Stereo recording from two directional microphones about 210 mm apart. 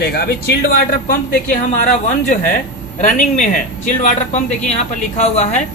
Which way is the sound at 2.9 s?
35° left (ahead or behind).